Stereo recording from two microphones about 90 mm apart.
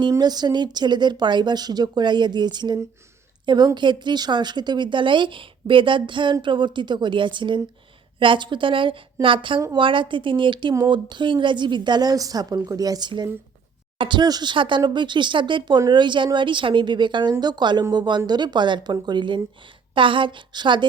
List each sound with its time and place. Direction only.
0.1 s a woman's voice: 50° right (ahead or behind)
14.0 s speech: 55° right (ahead or behind)
14.5 s speech: 65° right (ahead or behind)